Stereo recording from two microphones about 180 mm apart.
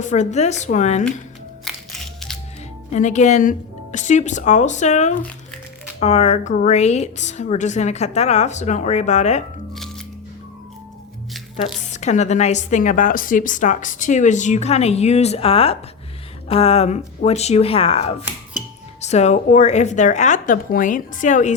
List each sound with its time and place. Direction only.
0.0 s a woman's voice: 40° left (ahead or behind)
1.6 s music: centre (ahead or behind)
2.9 s a woman's voice: 40° left (ahead or behind)
11.5 s a woman's voice: 40° left (ahead or behind)